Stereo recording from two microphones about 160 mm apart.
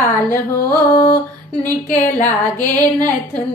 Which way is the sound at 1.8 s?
50° left (ahead or behind).